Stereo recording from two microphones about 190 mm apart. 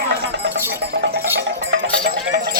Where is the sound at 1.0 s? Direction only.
55° right (ahead or behind).